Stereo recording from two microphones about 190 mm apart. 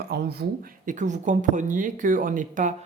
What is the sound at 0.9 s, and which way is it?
Speech, 40° right (ahead or behind).